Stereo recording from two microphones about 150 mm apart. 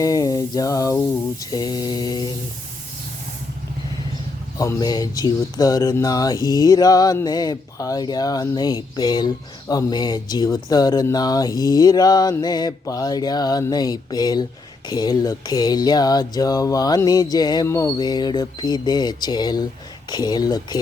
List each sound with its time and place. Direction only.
0.0 s speech: 25° left (ahead or behind)
4.5 s speech: 20° left (ahead or behind)